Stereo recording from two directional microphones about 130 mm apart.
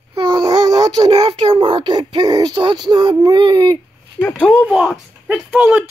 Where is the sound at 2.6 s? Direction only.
35° right (ahead or behind).